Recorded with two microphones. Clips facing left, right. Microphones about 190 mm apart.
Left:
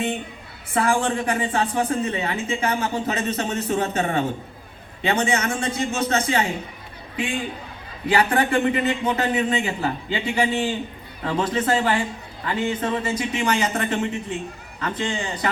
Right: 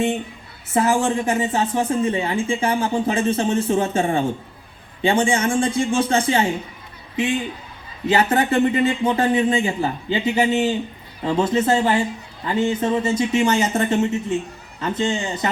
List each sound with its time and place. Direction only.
0.7 s a woman's voice: 25° right (ahead or behind)
8.0 s a woman's voice: 25° right (ahead or behind)